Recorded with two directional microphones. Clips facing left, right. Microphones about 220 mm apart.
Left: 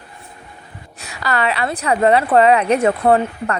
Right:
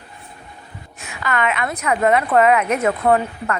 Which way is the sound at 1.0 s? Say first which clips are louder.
Left 1 dB; 35° left (ahead or behind).